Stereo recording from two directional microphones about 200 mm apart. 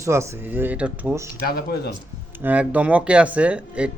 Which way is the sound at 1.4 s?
50° left (ahead or behind).